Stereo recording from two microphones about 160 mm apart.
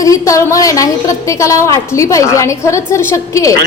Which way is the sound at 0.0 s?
20° left (ahead or behind).